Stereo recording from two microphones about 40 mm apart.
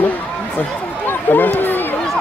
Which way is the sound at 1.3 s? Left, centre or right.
Left.